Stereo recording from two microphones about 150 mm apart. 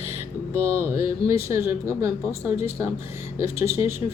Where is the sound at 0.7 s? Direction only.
15° right (ahead or behind).